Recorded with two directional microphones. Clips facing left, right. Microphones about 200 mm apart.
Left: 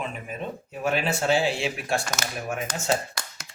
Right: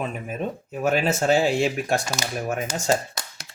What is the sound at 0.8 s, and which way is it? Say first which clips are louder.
Speech: right 4 dB; 45° right (ahead or behind).